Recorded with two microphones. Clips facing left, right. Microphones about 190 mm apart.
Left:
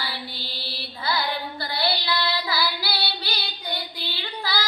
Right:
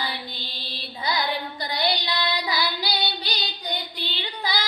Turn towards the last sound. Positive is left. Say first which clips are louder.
# right 1 dB
turn(degrees=-20)  # may be behind; listen again after turning